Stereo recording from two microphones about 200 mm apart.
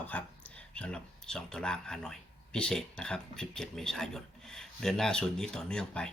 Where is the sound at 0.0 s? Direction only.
5° left (ahead or behind).